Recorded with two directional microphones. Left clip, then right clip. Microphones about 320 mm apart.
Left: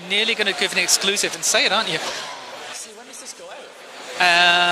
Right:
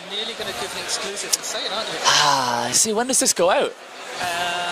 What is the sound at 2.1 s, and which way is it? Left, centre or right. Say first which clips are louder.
Speech: right 14 dB; right.